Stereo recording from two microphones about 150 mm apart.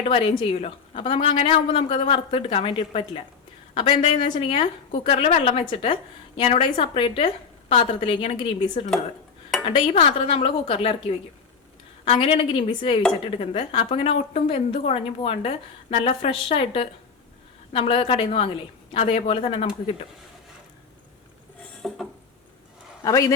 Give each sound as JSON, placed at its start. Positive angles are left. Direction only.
{"t": 0.0, "sound": "a woman's voice", "side_deg": 40}
{"t": 21.8, "sound": "a sound", "side_deg": 0}
{"t": 23.0, "sound": "a man's voice", "side_deg": 25}